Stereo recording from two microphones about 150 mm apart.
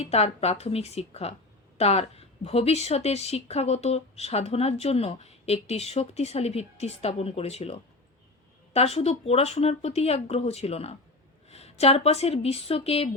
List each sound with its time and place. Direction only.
0.0 s a woman's voice: 45° left (ahead or behind)